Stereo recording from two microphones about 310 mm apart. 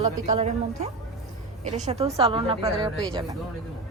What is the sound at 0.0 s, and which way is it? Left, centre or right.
A woman's voice, centre.